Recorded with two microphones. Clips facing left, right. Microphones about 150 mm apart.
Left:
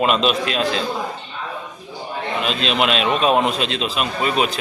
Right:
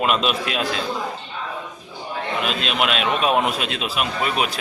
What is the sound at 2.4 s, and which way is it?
A man's voice, 5° right (ahead or behind).